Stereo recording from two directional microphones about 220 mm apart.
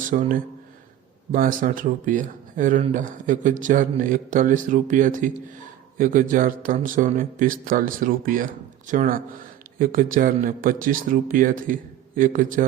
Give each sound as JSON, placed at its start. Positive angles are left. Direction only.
{"t": 0.0, "sound": "speech", "side_deg": -35}